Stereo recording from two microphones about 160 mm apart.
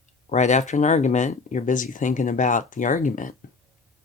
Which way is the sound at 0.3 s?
50° left (ahead or behind).